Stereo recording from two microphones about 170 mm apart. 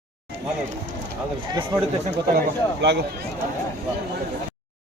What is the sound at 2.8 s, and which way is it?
Speech, 90° right.